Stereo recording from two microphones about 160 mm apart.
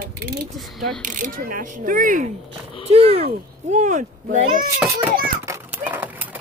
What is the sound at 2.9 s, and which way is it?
Speech, 40° right (ahead or behind).